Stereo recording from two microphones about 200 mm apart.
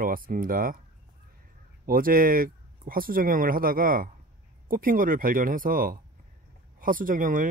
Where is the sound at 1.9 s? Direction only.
45° right (ahead or behind).